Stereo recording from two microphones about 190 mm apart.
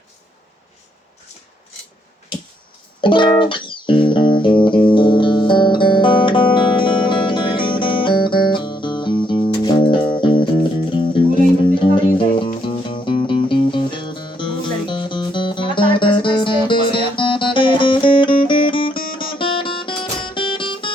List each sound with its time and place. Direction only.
3.0 s music: 25° left (ahead or behind)
11.7 s music: 25° left (ahead or behind)